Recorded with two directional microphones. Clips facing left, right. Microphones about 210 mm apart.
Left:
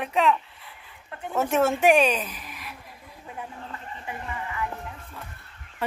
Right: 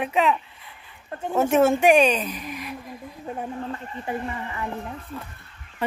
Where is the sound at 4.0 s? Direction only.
35° right (ahead or behind).